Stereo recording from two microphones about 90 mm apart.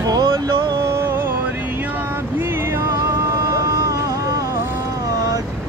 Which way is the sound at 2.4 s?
25° right (ahead or behind).